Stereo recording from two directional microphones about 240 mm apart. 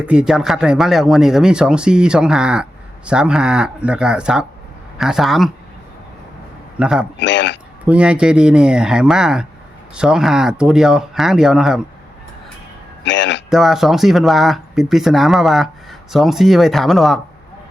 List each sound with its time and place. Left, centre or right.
0.0 s speech: centre
6.7 s speech: centre
7.2 s speech: left
7.9 s speech: centre
13.1 s a man's voice: left
13.5 s speech: centre